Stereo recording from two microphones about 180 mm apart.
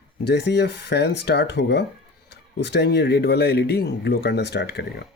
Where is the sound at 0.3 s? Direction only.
70° left (ahead or behind).